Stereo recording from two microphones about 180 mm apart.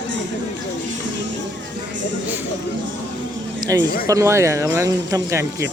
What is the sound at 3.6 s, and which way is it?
A man's voice, 20° right (ahead or behind).